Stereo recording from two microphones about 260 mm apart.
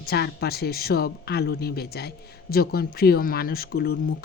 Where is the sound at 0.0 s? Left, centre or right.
Left.